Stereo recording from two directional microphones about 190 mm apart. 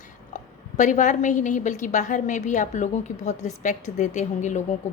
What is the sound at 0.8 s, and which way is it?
A woman's voice, 40° left (ahead or behind).